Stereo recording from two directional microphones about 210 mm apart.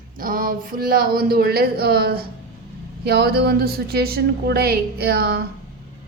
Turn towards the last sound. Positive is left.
turn(degrees=-50)  # may be behind; listen again after turning